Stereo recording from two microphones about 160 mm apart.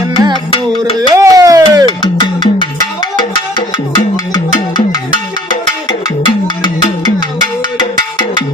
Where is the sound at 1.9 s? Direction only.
30° left (ahead or behind).